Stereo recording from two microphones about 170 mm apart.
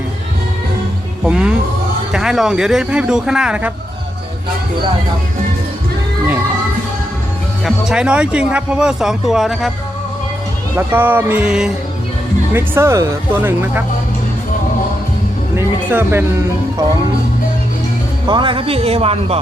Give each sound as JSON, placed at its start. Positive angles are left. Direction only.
{"t": 1.2, "sound": "speech", "side_deg": -5}
{"t": 7.6, "sound": "speech", "side_deg": -5}
{"t": 10.8, "sound": "speech", "side_deg": -10}
{"t": 12.5, "sound": "speech", "side_deg": -15}
{"t": 15.5, "sound": "music", "side_deg": -10}
{"t": 18.3, "sound": "speech", "side_deg": -30}